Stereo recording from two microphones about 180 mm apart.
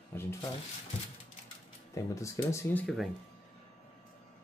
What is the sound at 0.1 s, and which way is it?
Speech, 15° left (ahead or behind).